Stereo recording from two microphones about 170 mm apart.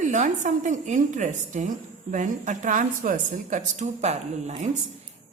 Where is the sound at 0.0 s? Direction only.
45° right (ahead or behind).